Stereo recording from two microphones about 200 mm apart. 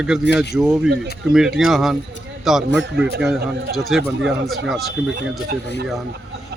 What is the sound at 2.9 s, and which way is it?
Speech, 55° right (ahead or behind).